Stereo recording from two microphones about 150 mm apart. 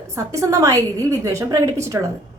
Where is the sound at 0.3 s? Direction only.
20° right (ahead or behind).